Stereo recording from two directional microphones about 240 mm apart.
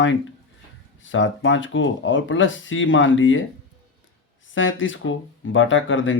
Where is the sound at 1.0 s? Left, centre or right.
Left.